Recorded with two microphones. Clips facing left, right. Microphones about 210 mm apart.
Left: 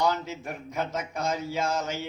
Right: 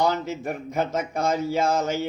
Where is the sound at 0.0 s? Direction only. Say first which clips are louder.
Right 4 dB; 55° right (ahead or behind).